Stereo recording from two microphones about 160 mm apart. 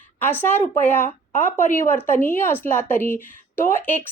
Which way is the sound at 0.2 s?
10° left (ahead or behind).